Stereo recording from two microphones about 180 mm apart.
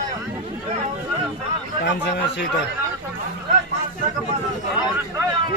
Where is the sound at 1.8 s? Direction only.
75° left (ahead or behind).